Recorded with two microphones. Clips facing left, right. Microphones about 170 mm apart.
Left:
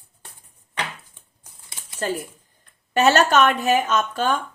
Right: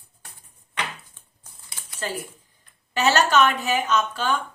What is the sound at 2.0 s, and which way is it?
Speech, 45° left (ahead or behind).